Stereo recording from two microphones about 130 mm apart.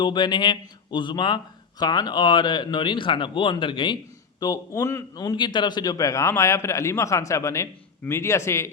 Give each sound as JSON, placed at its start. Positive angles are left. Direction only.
{"t": 0.0, "sound": "a man's voice", "side_deg": 35}